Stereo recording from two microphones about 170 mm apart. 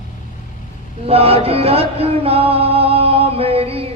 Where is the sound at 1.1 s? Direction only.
35° right (ahead or behind).